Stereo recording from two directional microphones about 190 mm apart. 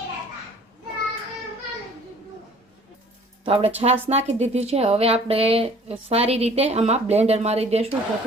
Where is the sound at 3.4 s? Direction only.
30° right (ahead or behind).